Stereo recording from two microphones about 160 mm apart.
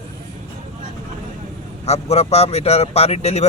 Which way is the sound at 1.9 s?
40° left (ahead or behind).